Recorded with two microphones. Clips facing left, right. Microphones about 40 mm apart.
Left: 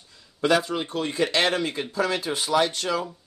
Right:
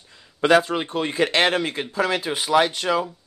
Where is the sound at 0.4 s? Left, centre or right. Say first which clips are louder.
Right 5 dB; right.